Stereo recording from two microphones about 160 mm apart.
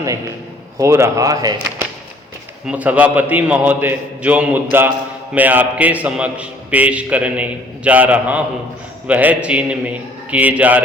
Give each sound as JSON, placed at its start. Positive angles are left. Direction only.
{"t": 0.8, "sound": "a man's voice", "side_deg": -15}
{"t": 2.6, "sound": "a man's voice", "side_deg": -10}